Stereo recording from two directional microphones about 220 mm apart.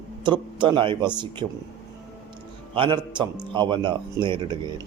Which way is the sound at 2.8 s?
20° right (ahead or behind).